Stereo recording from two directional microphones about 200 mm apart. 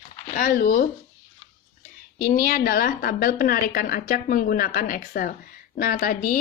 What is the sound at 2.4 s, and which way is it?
A woman's voice, 50° left (ahead or behind).